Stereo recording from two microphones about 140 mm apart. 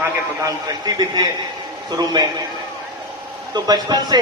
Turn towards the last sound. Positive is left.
turn(degrees=-30)  # may be behind; listen again after turning